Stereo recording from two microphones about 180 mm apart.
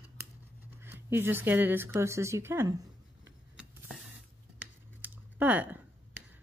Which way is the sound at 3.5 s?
5° right (ahead or behind).